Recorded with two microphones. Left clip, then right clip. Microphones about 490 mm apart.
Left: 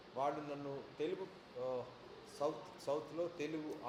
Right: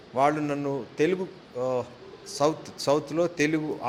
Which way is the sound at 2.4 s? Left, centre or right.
Right.